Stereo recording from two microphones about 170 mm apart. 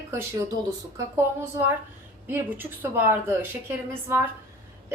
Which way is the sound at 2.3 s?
10° right (ahead or behind).